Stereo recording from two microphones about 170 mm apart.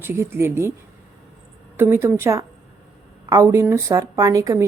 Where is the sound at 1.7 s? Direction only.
15° right (ahead or behind).